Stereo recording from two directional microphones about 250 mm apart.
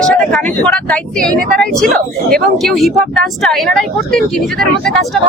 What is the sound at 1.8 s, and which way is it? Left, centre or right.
Speech, right.